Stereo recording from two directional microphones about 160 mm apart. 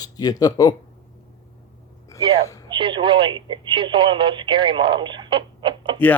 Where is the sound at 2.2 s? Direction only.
40° right (ahead or behind).